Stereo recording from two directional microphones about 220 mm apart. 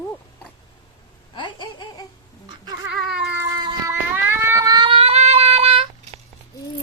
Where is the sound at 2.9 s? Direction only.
Centre (ahead or behind).